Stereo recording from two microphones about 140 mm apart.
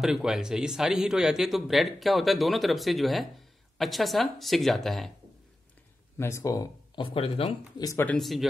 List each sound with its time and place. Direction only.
0.0 s speech: 5° right (ahead or behind)
6.1 s speech: 20° left (ahead or behind)
7.0 s speech: 40° left (ahead or behind)
7.8 s speech: 20° left (ahead or behind)
8.1 s speech: centre (ahead or behind)